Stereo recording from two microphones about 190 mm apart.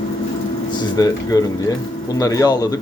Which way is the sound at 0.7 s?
20° left (ahead or behind).